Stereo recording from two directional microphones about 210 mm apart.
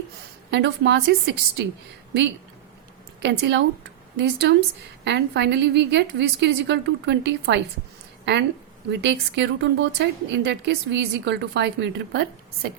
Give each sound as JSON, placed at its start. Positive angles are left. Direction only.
{"t": 0.5, "sound": "a woman's voice", "side_deg": -55}
{"t": 3.2, "sound": "a woman's voice", "side_deg": -55}